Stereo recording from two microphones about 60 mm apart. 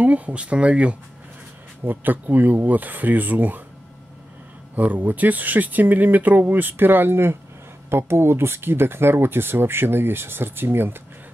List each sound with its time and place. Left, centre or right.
0.0 s speech: right
1.9 s speech: right
4.7 s speech: right